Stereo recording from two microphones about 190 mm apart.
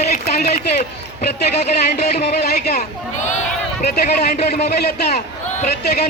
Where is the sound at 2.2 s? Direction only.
55° left (ahead or behind).